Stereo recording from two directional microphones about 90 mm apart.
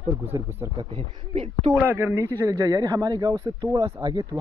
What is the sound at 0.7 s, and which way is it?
Speech, 85° right.